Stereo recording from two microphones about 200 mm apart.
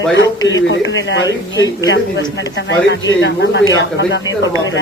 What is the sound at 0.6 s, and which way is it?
Speech, 65° left (ahead or behind).